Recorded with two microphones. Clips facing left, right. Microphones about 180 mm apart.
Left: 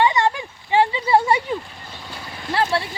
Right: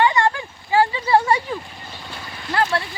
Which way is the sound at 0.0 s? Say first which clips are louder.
Even; 20° left (ahead or behind).